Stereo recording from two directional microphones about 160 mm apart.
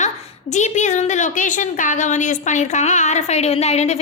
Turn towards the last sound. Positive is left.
turn(degrees=45)  # may be behind; listen again after turning